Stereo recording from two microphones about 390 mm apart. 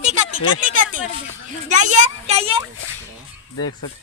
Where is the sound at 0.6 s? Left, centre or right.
Centre.